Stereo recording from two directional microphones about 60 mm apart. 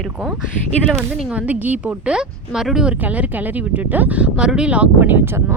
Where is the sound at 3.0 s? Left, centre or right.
Right.